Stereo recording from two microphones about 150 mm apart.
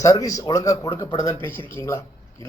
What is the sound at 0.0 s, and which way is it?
A man's voice, 20° left (ahead or behind).